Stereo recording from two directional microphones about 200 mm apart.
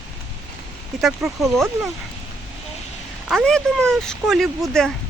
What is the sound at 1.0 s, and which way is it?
Speech, centre (ahead or behind).